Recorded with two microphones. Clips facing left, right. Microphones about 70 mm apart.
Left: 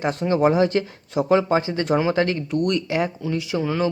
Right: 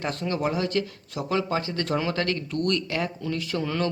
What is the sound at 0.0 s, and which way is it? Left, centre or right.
Speech, left.